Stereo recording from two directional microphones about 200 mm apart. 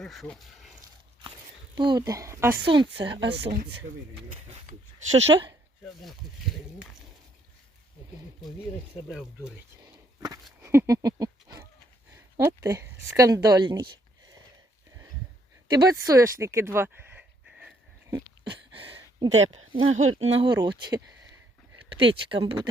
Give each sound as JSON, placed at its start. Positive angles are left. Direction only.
{"t": 0.0, "sound": "speech", "side_deg": 0}
{"t": 1.7, "sound": "speech", "side_deg": -20}
{"t": 2.6, "sound": "speech", "side_deg": -25}
{"t": 3.5, "sound": "speech", "side_deg": -45}
{"t": 5.2, "sound": "speech", "side_deg": -25}
{"t": 5.8, "sound": "speech", "side_deg": 0}
{"t": 10.2, "sound": "a sound", "side_deg": -15}
{"t": 10.6, "sound": "goat", "side_deg": -15}
{"t": 12.1, "sound": "speech", "side_deg": -15}
{"t": 15.7, "sound": "a sound", "side_deg": -20}
{"t": 18.7, "sound": "a sound", "side_deg": -25}
{"t": 19.5, "sound": "speech", "side_deg": -30}